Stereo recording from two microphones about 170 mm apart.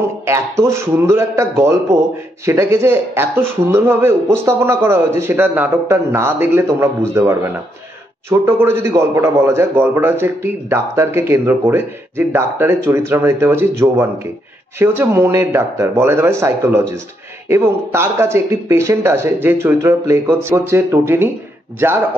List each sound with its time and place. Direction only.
0.2 s a man's voice: 15° right (ahead or behind)